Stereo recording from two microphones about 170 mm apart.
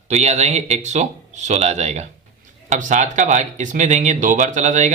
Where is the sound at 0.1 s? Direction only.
40° right (ahead or behind).